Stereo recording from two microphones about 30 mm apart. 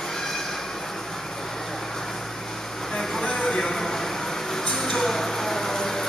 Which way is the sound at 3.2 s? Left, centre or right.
Left.